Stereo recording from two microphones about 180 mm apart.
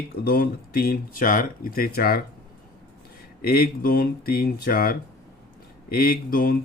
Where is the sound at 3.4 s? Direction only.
55° left (ahead or behind).